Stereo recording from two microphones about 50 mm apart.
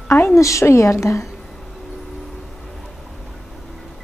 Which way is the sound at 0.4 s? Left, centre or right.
Left.